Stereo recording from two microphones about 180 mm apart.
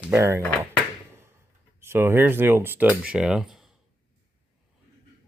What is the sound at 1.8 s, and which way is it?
Speech, 15° right (ahead or behind).